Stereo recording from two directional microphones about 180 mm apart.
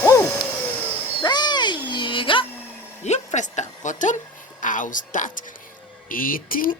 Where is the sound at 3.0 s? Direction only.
40° left (ahead or behind).